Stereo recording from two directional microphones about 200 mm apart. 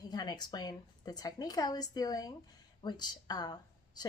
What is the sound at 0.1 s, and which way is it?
A woman's voice, 20° left (ahead or behind).